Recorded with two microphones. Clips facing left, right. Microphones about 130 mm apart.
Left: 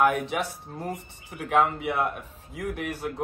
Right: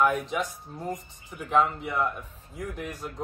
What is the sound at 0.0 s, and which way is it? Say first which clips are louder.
A man's voice: left 2 dB; 65° left (ahead or behind).